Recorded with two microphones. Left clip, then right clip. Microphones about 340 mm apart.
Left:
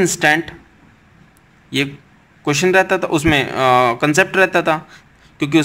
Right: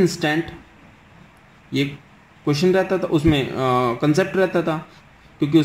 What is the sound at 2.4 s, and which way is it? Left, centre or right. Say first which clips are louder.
A man's voice: left 5 dB; left.